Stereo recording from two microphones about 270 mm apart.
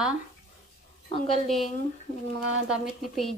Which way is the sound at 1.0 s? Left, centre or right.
Left.